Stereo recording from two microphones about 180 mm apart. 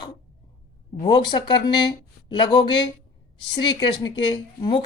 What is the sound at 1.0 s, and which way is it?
A woman's voice, 25° left (ahead or behind).